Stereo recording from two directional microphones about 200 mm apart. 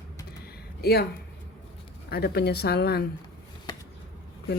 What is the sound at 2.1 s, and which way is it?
Speech, 50° left (ahead or behind).